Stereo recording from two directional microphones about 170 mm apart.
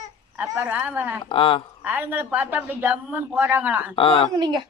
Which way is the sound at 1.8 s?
10° right (ahead or behind).